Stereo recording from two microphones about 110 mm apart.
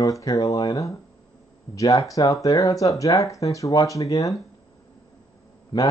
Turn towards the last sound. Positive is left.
turn(degrees=40)  # may be behind; listen again after turning